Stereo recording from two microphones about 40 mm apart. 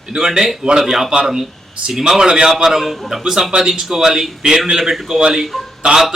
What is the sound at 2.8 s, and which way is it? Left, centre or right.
A man's voice, centre.